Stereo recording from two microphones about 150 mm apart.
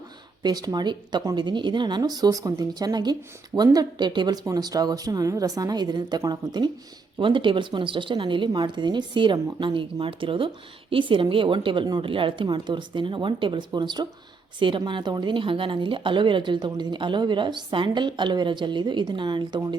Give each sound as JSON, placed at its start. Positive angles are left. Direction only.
{"t": 0.4, "sound": "speech", "side_deg": -25}